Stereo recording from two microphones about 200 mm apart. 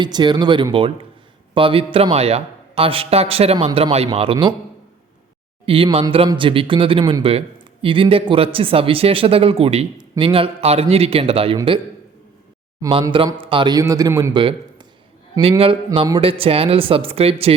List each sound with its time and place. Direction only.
0.0 s speech: 20° right (ahead or behind)
5.6 s speech: 25° right (ahead or behind)
12.8 s speech: 25° right (ahead or behind)